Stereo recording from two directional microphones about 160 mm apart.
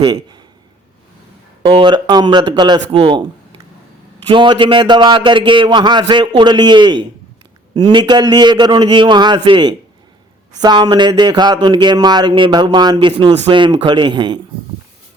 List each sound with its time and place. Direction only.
0.0 s speech: 25° right (ahead or behind)
1.6 s speech: 30° right (ahead or behind)
4.3 s speech: 30° right (ahead or behind)
13.3 s speech: 45° right (ahead or behind)
13.7 s speech: 30° right (ahead or behind)